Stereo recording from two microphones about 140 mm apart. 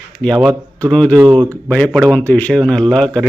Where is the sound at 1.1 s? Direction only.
20° right (ahead or behind).